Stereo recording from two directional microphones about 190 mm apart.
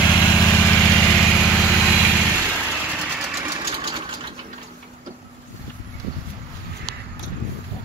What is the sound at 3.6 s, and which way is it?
Sewing machine, 30° right (ahead or behind).